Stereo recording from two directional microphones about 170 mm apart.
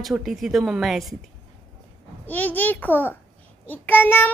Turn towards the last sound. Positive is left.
turn(degrees=10)  # may be behind; listen again after turning